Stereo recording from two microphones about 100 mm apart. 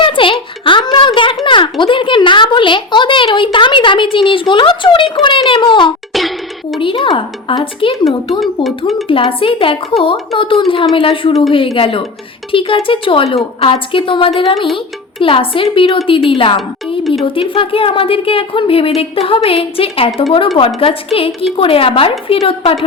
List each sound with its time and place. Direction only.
0.0 s a sound: 60° left (ahead or behind)
1.8 s a woman's voice: 55° left (ahead or behind)
6.1 s music: centre (ahead or behind)
6.7 s speech: 60° left (ahead or behind)
9.0 s a woman's voice: 60° left (ahead or behind)